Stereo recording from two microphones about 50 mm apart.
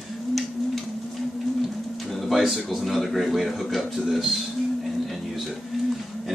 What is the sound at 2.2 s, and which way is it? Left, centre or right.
Speech, centre.